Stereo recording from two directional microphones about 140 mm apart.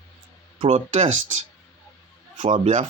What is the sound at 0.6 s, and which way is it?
Speech, 50° right (ahead or behind).